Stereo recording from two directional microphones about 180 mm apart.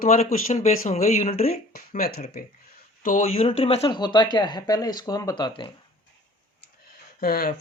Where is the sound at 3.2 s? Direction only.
35° left (ahead or behind).